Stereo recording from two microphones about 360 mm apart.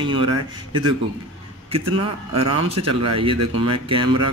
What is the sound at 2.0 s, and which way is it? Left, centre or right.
A man's voice, centre.